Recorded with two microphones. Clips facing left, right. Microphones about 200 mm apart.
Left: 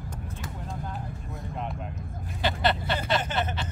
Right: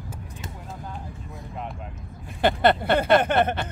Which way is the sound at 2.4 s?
55° right (ahead or behind).